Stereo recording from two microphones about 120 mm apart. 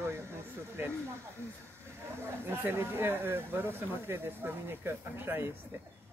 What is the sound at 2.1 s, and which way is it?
Speech, 20° right (ahead or behind).